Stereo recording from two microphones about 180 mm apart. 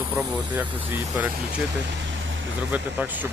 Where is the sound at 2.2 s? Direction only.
90° right.